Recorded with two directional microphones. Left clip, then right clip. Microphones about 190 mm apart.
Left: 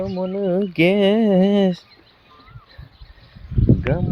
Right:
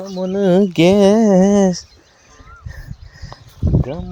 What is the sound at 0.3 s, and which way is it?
Speech, 55° right (ahead or behind).